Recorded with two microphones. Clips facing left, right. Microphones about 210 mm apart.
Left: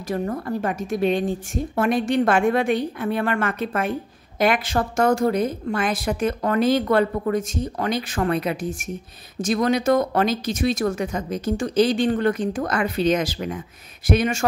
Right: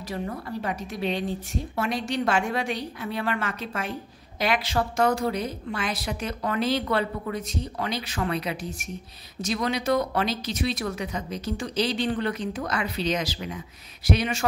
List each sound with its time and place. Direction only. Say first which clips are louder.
0.1 s a woman's voice: left 7 dB; 45° left (ahead or behind)